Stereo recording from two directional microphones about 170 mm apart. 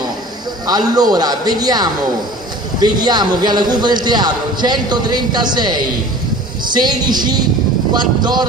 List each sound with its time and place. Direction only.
0.7 s a man's voice: 25° right (ahead or behind)